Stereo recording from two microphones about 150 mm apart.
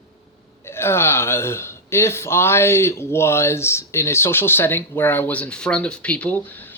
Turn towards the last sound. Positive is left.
turn(degrees=10)  # may be behind; listen again after turning